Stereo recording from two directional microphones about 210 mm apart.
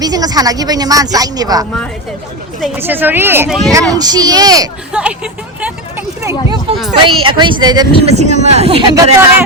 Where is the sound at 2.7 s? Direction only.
10° right (ahead or behind).